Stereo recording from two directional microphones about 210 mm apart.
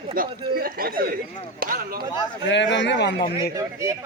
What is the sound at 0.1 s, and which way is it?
Speech, 45° right (ahead or behind).